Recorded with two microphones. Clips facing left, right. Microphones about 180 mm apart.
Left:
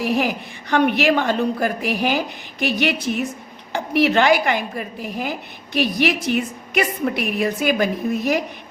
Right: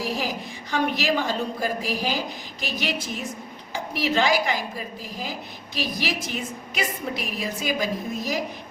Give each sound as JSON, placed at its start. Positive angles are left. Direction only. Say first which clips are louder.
{"t": 0.0, "sound": "a woman's voice", "louder": "left 7 dB", "side_deg": 60}